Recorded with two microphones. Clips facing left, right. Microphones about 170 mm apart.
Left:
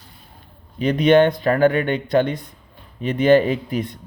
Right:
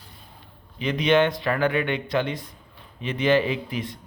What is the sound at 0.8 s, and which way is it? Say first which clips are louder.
Speech: left 6 dB; 45° left (ahead or behind).